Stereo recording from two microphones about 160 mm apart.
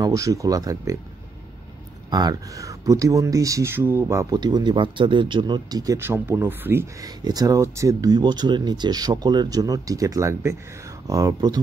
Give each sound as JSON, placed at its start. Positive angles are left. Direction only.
{"t": 0.0, "sound": "speech", "side_deg": -20}
{"t": 2.0, "sound": "speech", "side_deg": -25}